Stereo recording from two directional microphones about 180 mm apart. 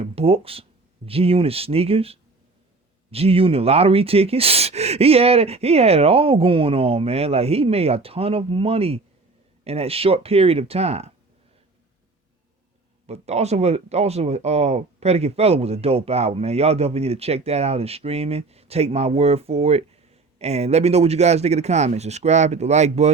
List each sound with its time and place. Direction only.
0.0 s speech: 35° right (ahead or behind)
13.1 s speech: 35° right (ahead or behind)